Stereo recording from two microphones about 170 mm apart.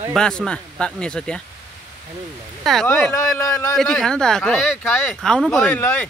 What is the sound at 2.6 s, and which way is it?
Speech, centre (ahead or behind).